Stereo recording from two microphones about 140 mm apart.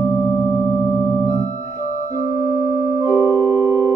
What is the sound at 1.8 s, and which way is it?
Organ, 70° left (ahead or behind).